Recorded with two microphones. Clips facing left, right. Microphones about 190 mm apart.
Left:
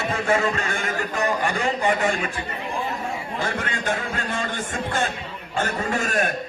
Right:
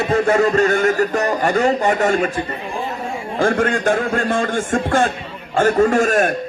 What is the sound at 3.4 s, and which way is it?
A man's voice, 50° right (ahead or behind).